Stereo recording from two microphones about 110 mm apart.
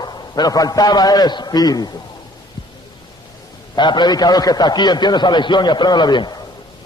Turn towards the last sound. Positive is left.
turn(degrees=40)  # may be behind; listen again after turning